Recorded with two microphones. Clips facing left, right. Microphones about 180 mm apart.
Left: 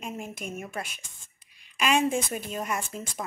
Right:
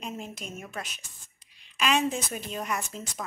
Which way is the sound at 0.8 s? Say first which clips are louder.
Even; 50° left (ahead or behind).